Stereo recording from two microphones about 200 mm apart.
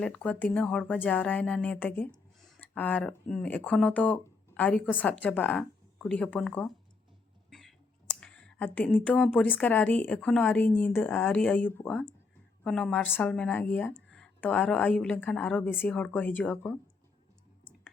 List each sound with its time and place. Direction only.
0.0 s speech: 5° left (ahead or behind)
8.2 s speech: 5° left (ahead or behind)